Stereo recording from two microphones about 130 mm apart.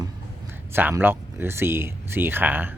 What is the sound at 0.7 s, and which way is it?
Speech, 15° right (ahead or behind).